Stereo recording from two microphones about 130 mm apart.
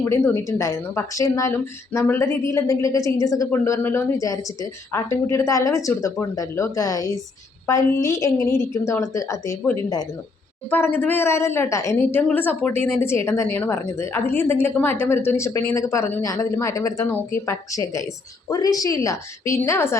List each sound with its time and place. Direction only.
0.0 s a woman's voice: 20° left (ahead or behind)
10.7 s a woman's voice: 15° left (ahead or behind)